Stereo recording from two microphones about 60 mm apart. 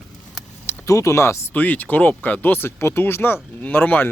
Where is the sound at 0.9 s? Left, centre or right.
Left.